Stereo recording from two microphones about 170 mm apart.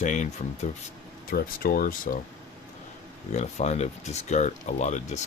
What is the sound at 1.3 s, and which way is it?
Speech, 60° left (ahead or behind).